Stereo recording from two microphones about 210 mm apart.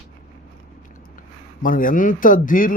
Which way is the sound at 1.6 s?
40° left (ahead or behind).